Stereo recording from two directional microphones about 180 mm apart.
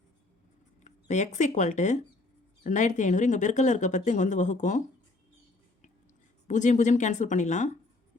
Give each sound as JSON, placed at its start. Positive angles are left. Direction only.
{"t": 0.9, "sound": "speech", "side_deg": 40}
{"t": 6.5, "sound": "speech", "side_deg": 45}